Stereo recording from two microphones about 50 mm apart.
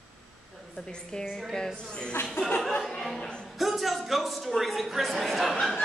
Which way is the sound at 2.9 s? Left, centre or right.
Centre.